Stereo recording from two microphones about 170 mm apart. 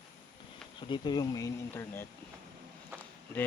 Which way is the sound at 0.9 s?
25° left (ahead or behind).